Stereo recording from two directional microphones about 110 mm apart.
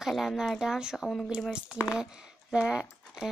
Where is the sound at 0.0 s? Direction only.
Centre (ahead or behind).